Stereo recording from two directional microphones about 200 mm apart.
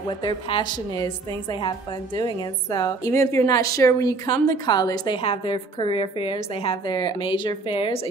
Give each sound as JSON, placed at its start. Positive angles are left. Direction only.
{"t": 0.2, "sound": "a woman's voice", "side_deg": 20}